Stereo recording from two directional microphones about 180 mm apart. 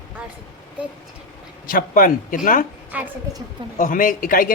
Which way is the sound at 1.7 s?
50° left (ahead or behind).